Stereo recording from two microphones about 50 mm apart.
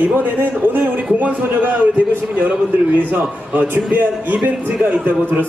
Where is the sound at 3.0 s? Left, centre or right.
Right.